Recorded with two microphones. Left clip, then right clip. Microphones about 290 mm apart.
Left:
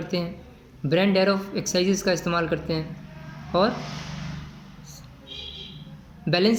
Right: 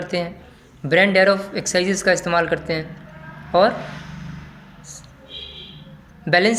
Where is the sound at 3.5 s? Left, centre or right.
Right.